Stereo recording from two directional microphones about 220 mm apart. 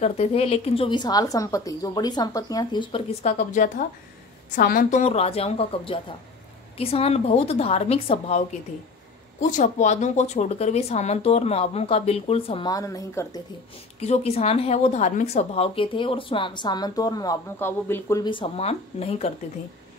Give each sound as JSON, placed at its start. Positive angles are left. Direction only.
{"t": 0.0, "sound": "a woman's voice", "side_deg": 30}
{"t": 13.9, "sound": "a woman's voice", "side_deg": 30}